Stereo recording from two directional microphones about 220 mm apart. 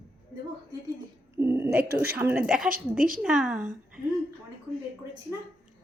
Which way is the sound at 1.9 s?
45° right (ahead or behind).